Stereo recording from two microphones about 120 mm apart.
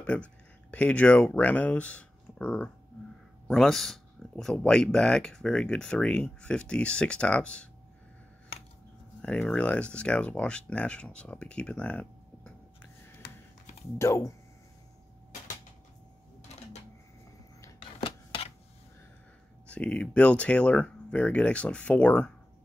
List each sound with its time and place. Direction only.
0.0 s speech: 10° left (ahead or behind)
9.2 s speech: 10° left (ahead or behind)
13.9 s speech: 25° left (ahead or behind)
19.7 s speech: 10° left (ahead or behind)